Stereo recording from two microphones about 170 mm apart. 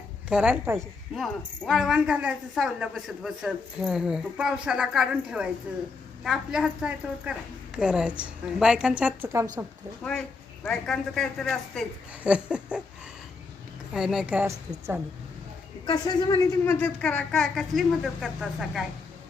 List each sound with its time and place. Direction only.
0.3 s a woman's voice: 5° right (ahead or behind)
1.1 s a woman's voice: centre (ahead or behind)
10.0 s speech: 5° left (ahead or behind)
13.9 s a woman's voice: 5° right (ahead or behind)
15.9 s a woman's voice: 25° left (ahead or behind)
16.6 s speech: 10° left (ahead or behind)